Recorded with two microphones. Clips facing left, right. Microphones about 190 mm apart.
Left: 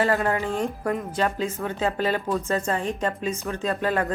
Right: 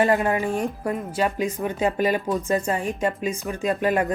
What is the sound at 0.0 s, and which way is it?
Speech, 15° right (ahead or behind).